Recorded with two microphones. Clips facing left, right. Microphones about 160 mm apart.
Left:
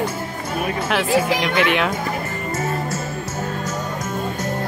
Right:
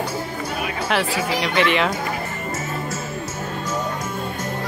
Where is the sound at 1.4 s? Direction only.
Centre (ahead or behind).